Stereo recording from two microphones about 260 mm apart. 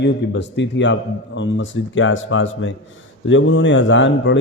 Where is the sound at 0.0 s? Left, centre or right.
Left.